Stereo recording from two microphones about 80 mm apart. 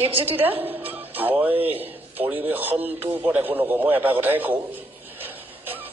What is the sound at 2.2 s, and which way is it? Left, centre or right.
A man's voice, right.